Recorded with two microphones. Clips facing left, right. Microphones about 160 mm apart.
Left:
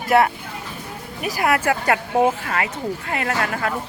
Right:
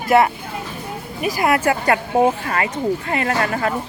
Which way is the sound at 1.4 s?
10° right (ahead or behind).